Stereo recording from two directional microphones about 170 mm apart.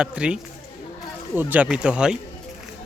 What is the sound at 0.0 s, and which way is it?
Speech, 5° right (ahead or behind).